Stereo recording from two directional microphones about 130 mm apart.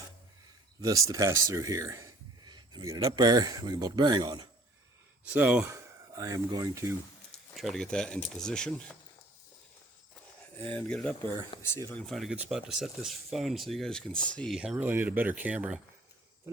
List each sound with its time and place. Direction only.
0.8 s speech: 25° right (ahead or behind)
5.2 s speech: 10° right (ahead or behind)
5.7 s speech: 25° right (ahead or behind)
7.5 s speech: centre (ahead or behind)
10.6 s speech: 15° left (ahead or behind)
11.6 s speech: 20° left (ahead or behind)
11.9 s speech: centre (ahead or behind)
14.6 s speech: 10° right (ahead or behind)